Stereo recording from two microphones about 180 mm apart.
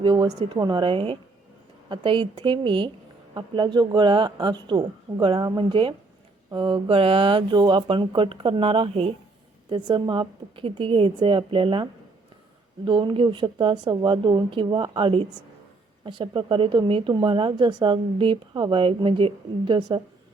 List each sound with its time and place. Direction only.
0.0 s a woman's voice: 25° right (ahead or behind)